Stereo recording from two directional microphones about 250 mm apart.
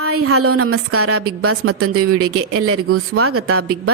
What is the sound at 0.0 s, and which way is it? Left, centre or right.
A woman's voice, right.